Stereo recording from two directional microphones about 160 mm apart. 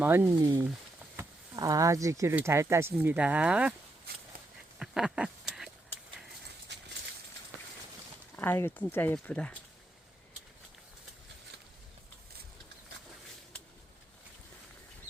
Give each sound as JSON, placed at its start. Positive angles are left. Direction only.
{"t": 0.0, "sound": "speech", "side_deg": -10}
{"t": 4.8, "sound": "duck", "side_deg": -5}
{"t": 6.7, "sound": "a sound", "side_deg": -90}
{"t": 8.4, "sound": "speech", "side_deg": 15}